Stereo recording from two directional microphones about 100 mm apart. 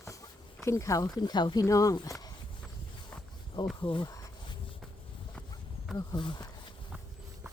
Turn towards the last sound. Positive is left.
turn(degrees=50)  # may be behind; listen again after turning